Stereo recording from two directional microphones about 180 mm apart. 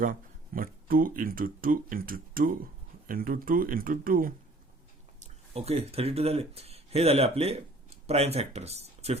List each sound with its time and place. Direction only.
0.0 s speech: 50° right (ahead or behind)
5.2 s speech: 35° right (ahead or behind)